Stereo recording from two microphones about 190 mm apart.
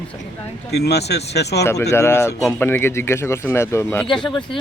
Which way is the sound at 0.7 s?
60° left (ahead or behind).